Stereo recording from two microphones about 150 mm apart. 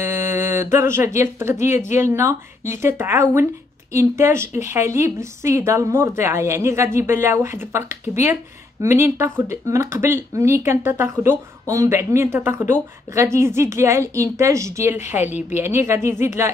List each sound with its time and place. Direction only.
0.0 s speech: 15° right (ahead or behind)